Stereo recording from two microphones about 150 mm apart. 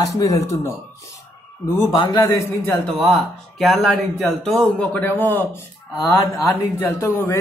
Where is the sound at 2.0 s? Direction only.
25° left (ahead or behind).